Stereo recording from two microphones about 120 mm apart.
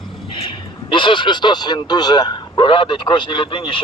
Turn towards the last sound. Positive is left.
turn(degrees=45)  # may be behind; listen again after turning